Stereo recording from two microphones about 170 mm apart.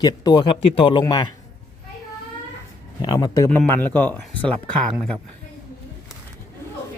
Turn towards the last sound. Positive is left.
turn(degrees=0)  # may be behind; listen again after turning